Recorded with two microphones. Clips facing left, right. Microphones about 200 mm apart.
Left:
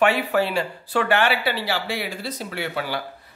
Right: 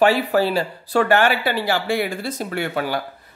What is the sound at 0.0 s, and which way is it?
Speech, 35° right (ahead or behind).